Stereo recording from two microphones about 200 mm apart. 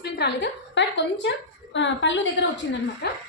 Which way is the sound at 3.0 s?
55° left (ahead or behind).